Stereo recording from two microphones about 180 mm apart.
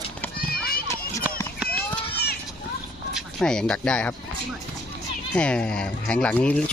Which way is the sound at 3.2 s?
5° left (ahead or behind).